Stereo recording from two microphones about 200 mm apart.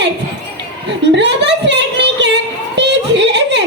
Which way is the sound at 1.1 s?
60° right (ahead or behind).